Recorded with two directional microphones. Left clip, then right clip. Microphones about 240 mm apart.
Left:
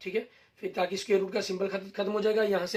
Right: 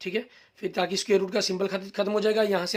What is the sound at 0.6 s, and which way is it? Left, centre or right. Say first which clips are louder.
A man's voice: right 3 dB; right.